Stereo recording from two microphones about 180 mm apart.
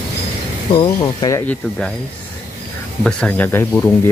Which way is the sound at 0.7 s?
30° left (ahead or behind).